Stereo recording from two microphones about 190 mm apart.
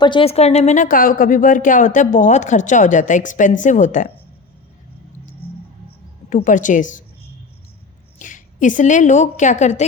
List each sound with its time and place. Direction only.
0.0 s speech: 25° left (ahead or behind)
6.3 s speech: 40° left (ahead or behind)
8.2 s speech: 40° left (ahead or behind)